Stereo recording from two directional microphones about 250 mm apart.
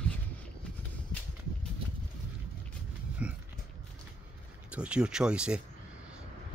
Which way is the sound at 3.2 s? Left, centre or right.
Centre.